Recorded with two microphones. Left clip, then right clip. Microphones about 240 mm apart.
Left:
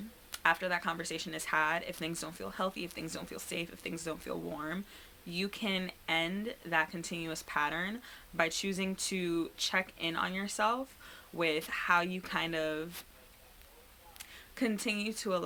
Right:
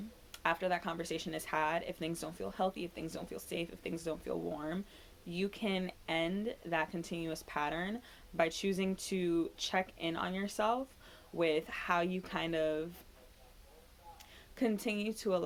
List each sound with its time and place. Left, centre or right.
0.3 s speech: left
14.2 s speech: left